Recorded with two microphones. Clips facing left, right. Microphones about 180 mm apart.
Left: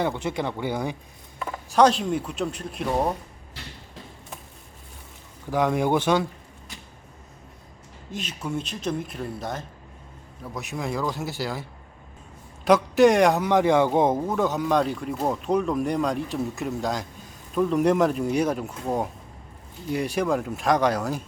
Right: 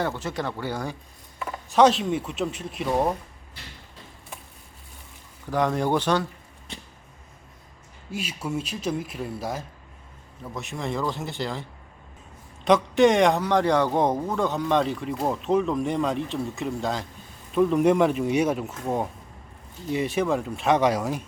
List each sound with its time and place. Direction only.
0.0 s speech: 15° left (ahead or behind)
1.7 s speech: centre (ahead or behind)
5.5 s speech: 10° left (ahead or behind)
8.1 s speech: 10° right (ahead or behind)
12.6 s speech: centre (ahead or behind)